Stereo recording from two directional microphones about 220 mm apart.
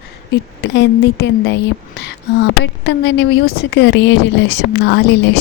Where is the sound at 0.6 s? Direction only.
55° left (ahead or behind).